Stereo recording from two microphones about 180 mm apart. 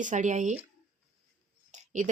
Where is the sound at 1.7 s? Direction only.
45° right (ahead or behind).